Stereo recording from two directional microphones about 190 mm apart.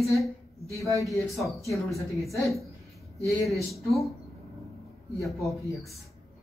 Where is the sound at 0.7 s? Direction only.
15° left (ahead or behind).